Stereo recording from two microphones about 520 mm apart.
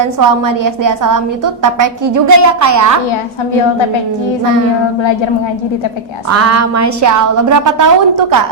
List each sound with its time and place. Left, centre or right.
0.0 s a woman's voice: right
6.2 s a woman's voice: right